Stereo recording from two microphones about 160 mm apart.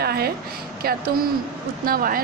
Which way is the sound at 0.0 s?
75° right (ahead or behind).